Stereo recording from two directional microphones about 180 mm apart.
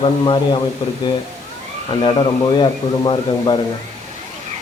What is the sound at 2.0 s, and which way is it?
Speech, 25° left (ahead or behind).